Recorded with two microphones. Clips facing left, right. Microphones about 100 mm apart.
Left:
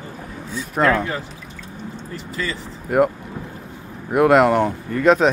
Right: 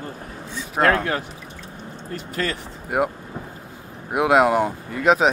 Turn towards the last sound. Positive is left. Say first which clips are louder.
# left 3 dB
turn(degrees=-5)  # may be behind; listen again after turning